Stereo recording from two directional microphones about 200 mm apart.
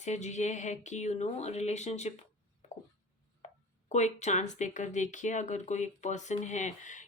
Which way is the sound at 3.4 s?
35° left (ahead or behind).